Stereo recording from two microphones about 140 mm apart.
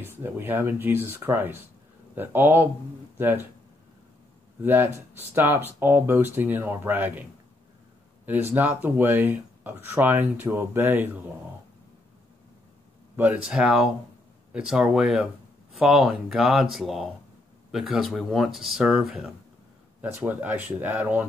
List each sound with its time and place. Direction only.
0.0 s speech: 15° right (ahead or behind)
4.6 s speech: 15° right (ahead or behind)
8.5 s speech: 15° right (ahead or behind)
13.1 s speech: 10° right (ahead or behind)